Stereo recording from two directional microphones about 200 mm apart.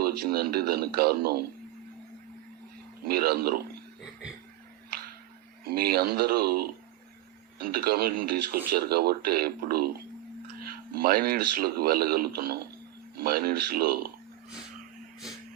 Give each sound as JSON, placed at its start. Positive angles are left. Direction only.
{"t": 0.0, "sound": "speech", "side_deg": -50}
{"t": 3.0, "sound": "speech", "side_deg": -50}
{"t": 5.6, "sound": "speech", "side_deg": -50}